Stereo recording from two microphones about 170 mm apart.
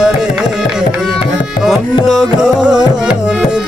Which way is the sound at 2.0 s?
Centre (ahead or behind).